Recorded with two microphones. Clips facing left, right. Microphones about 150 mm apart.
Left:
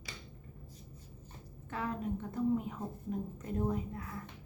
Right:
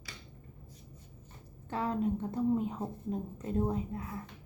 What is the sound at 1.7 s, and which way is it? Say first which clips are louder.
A woman's voice: right 5 dB; 30° right (ahead or behind).